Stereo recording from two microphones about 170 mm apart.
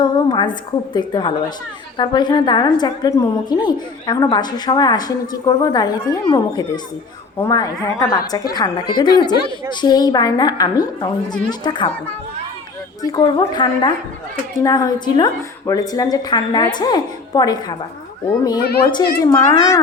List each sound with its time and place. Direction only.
0.0 s a sound: 25° left (ahead or behind)
0.9 s a woman's voice: 25° left (ahead or behind)
13.0 s a woman's voice: 25° left (ahead or behind)
19.2 s a woman's voice: 20° left (ahead or behind)